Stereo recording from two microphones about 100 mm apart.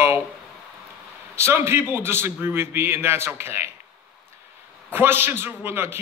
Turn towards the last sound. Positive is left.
turn(degrees=-25)  # may be behind; listen again after turning